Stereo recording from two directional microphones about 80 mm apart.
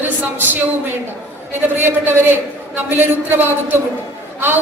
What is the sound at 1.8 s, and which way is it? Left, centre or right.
A woman's voice, right.